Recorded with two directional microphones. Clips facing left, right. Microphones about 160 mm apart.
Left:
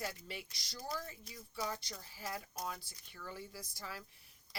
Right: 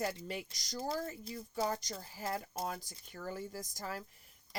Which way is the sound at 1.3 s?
45° right (ahead or behind).